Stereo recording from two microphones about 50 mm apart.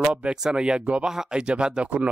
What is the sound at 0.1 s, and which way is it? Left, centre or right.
Speech, centre.